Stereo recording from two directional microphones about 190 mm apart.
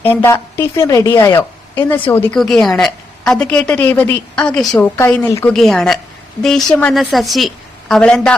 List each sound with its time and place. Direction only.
0.0 s a woman's voice: 10° left (ahead or behind)
5.5 s a woman's voice: centre (ahead or behind)